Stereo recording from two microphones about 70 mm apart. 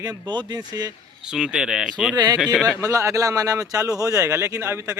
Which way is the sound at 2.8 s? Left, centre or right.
Right.